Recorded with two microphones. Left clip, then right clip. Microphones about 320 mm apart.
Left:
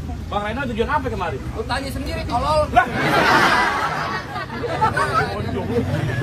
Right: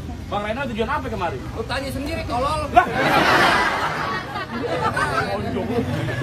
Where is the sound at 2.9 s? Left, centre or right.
Right.